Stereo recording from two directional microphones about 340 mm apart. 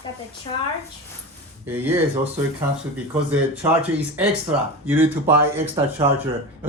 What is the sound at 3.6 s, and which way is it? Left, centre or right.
Speech, centre.